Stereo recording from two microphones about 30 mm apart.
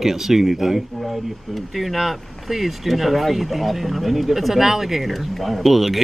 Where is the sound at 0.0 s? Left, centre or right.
Centre.